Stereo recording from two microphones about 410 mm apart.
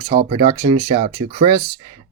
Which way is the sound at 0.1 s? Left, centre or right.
Centre.